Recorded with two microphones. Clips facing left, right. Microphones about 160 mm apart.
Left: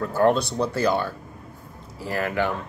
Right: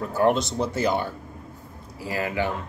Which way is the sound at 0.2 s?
20° right (ahead or behind).